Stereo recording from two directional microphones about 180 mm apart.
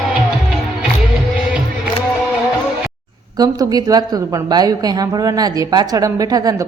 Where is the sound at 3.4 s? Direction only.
20° right (ahead or behind).